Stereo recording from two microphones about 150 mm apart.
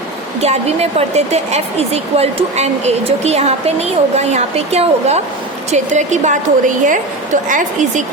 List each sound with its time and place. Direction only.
0.3 s speech: 45° right (ahead or behind)